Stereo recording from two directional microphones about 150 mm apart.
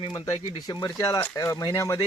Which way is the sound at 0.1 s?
25° left (ahead or behind).